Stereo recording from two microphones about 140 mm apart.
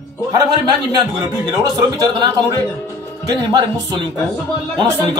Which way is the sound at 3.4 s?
30° right (ahead or behind).